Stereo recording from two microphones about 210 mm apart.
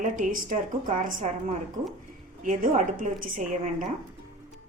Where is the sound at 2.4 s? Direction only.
40° right (ahead or behind).